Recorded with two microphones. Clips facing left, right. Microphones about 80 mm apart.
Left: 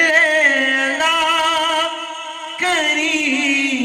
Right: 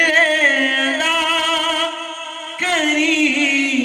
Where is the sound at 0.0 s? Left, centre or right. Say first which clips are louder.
Left 1 dB; centre.